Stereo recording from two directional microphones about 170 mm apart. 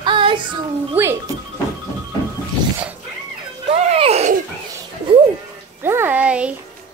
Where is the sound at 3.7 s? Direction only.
35° right (ahead or behind).